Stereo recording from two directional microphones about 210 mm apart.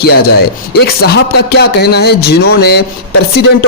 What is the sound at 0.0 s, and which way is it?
A man's voice, 50° left (ahead or behind).